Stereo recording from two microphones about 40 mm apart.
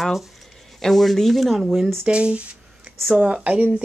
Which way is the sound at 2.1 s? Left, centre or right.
Right.